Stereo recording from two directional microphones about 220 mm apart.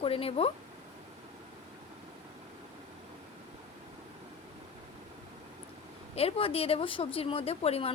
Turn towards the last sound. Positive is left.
turn(degrees=25)  # may be behind; listen again after turning